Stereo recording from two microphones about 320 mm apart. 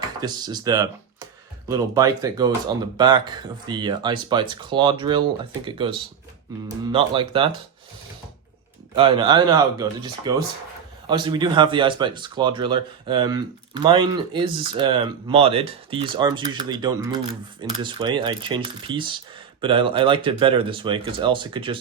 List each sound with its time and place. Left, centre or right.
0.2 s speech: centre
9.0 s speech: centre